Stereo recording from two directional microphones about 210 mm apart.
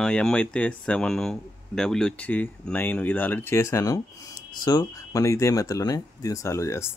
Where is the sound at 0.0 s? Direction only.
5° left (ahead or behind).